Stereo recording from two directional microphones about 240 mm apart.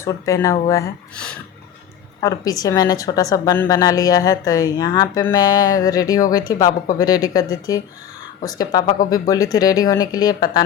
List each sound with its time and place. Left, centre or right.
0.0 s a woman's voice: centre
2.2 s a woman's voice: centre